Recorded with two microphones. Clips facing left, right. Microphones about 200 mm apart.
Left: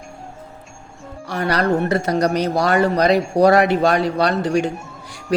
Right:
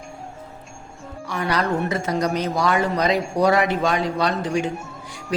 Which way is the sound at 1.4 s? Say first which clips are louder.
Left 3 dB; 65° left (ahead or behind).